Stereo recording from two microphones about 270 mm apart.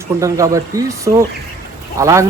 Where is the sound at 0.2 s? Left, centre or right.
Centre.